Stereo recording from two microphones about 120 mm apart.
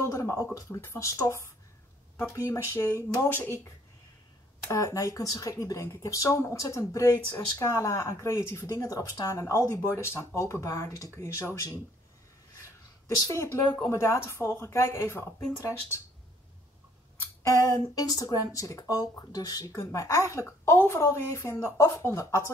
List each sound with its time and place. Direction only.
0.0 s a sound: 25° left (ahead or behind)
0.6 s speech: 25° left (ahead or behind)
13.3 s speech: 25° left (ahead or behind)
17.2 s speech: 25° left (ahead or behind)